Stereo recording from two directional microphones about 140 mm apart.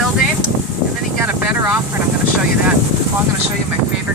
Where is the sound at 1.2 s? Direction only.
15° right (ahead or behind).